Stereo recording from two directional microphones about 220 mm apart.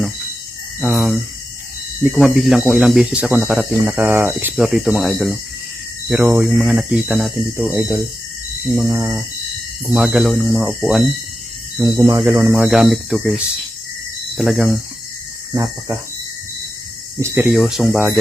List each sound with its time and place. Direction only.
0.8 s speech: 5° right (ahead or behind)
2.1 s speech: centre (ahead or behind)
11.9 s speech: 15° right (ahead or behind)
15.5 s speech: 15° right (ahead or behind)
17.2 s speech: 10° right (ahead or behind)